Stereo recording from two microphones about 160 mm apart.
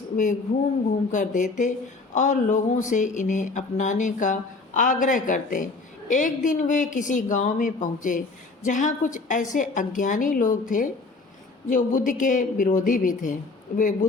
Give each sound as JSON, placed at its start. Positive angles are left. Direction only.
{"t": 1.1, "sound": "a woman's voice", "side_deg": 55}